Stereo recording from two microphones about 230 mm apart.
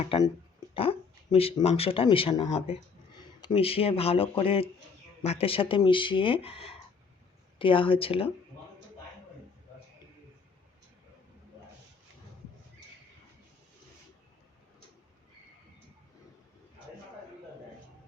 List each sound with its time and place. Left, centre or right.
0.0 s speech: left